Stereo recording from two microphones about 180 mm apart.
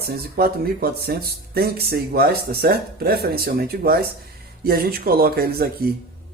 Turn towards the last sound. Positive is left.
turn(degrees=-55)  # may be behind; listen again after turning